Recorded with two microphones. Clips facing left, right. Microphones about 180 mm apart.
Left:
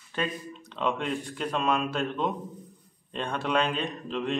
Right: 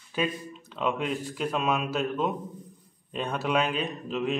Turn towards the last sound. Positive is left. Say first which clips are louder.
# right 1 dB
turn(degrees=-5)  # may be behind; listen again after turning